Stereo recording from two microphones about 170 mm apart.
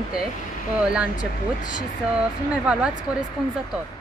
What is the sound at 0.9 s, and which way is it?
Speech, 5° right (ahead or behind).